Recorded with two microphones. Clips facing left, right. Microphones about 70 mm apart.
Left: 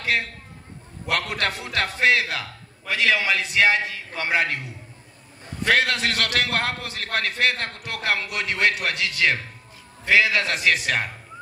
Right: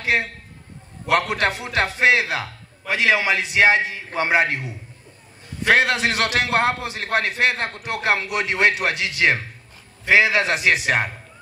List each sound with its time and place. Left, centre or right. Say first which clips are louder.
0.0 s a man's voice: right 3 dB; right